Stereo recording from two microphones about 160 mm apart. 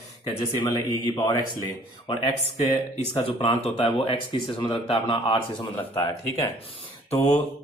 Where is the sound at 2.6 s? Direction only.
40° left (ahead or behind).